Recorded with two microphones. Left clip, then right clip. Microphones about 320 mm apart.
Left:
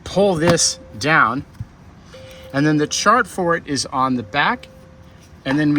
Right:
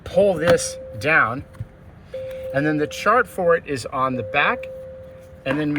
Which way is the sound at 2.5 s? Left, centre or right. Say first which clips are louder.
Left 4 dB; centre.